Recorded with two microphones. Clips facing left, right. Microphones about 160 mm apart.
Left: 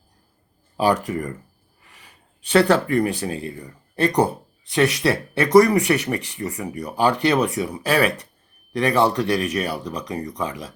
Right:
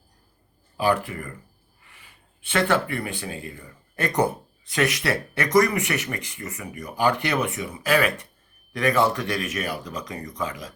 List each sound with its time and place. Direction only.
0.8 s speech: 40° left (ahead or behind)